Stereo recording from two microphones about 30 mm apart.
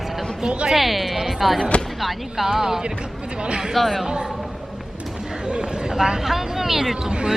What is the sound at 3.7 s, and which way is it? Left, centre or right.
Speech, centre.